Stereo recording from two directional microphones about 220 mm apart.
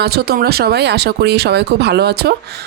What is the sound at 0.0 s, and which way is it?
Speech, 45° right (ahead or behind).